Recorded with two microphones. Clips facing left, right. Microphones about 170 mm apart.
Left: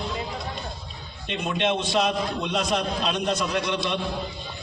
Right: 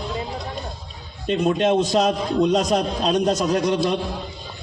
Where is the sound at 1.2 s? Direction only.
40° right (ahead or behind).